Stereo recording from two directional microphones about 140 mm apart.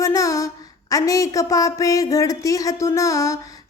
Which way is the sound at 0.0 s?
25° left (ahead or behind).